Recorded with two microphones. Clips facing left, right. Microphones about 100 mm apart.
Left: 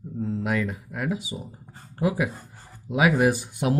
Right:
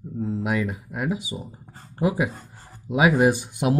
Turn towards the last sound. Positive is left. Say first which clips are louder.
# right 2 dB
turn(degrees=-20)  # may be behind; listen again after turning